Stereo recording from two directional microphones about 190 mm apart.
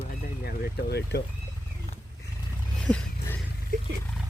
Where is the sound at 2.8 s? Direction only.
5° left (ahead or behind).